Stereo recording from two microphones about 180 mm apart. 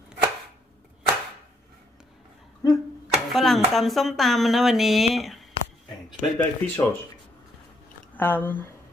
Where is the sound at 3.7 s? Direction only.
Centre (ahead or behind).